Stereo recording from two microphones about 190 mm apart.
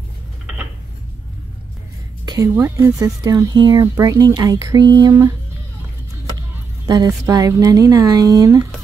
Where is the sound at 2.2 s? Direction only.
20° right (ahead or behind).